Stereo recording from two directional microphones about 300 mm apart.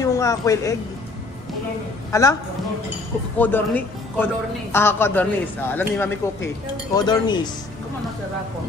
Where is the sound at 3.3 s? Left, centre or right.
Centre.